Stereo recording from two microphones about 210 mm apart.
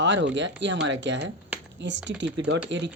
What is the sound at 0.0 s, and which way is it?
Speech, 60° right (ahead or behind).